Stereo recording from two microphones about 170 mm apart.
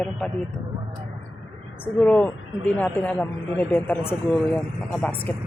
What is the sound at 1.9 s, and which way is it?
A man's voice, 5° left (ahead or behind).